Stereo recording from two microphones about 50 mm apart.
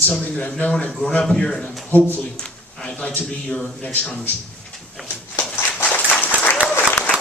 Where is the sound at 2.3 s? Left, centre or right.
Centre.